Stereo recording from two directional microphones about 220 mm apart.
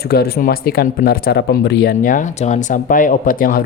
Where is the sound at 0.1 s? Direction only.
45° left (ahead or behind).